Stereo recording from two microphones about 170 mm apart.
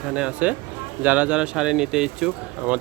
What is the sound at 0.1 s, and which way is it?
Speech, 5° right (ahead or behind).